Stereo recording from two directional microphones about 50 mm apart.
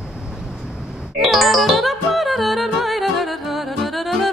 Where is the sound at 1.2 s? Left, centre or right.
Centre.